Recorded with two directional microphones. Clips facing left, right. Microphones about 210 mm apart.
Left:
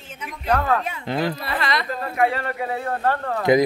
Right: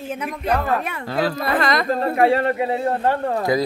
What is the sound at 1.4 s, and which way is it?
Speech, 45° right (ahead or behind).